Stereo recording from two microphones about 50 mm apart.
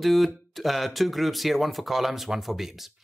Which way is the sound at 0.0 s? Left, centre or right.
Centre.